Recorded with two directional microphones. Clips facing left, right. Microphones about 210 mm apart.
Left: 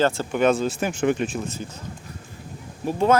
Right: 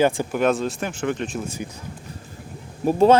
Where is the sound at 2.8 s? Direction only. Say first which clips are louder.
Right 6 dB; 45° right (ahead or behind).